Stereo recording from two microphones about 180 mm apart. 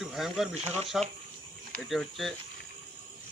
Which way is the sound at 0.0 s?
Centre (ahead or behind).